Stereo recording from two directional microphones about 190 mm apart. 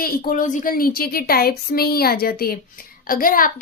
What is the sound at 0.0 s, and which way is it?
Speech, 45° left (ahead or behind).